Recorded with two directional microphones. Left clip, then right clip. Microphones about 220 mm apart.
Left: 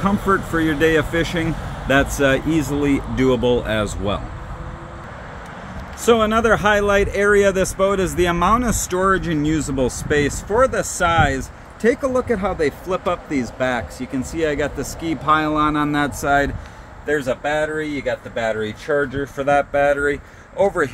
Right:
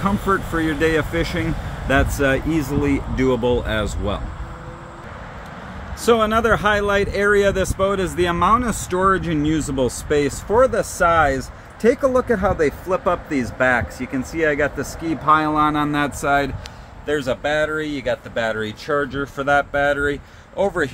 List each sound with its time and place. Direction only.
0.0 s speech: centre (ahead or behind)
6.0 s speech: centre (ahead or behind)
11.8 s speech: 30° right (ahead or behind); by 16.5 s 10° right (ahead or behind)
17.0 s speech: 5° left (ahead or behind)